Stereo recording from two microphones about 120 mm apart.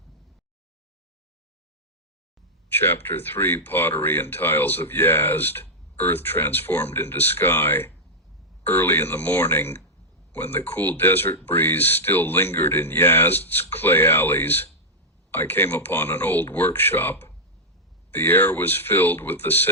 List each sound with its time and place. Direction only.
2.9 s speech: 15° left (ahead or behind)